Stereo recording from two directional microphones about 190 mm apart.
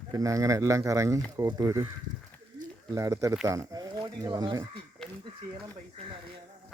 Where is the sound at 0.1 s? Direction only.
15° right (ahead or behind).